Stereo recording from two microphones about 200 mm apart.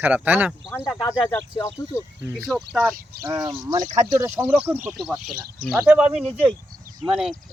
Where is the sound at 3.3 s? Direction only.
20° right (ahead or behind); by 7.3 s centre (ahead or behind).